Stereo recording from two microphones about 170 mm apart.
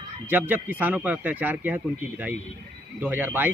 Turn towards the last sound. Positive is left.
turn(degrees=-10)  # may be behind; listen again after turning